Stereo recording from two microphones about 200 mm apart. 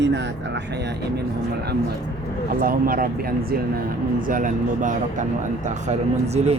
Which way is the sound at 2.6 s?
45° right (ahead or behind).